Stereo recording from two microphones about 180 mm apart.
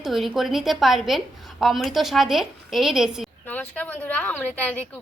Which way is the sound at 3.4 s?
10° left (ahead or behind).